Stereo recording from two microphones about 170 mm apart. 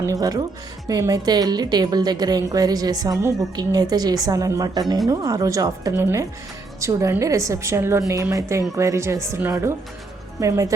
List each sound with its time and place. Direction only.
0.0 s a woman's voice: 20° right (ahead or behind)